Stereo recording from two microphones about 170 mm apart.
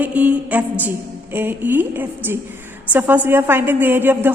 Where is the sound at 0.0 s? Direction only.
5° right (ahead or behind).